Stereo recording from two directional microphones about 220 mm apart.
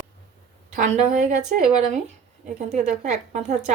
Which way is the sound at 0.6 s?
30° right (ahead or behind).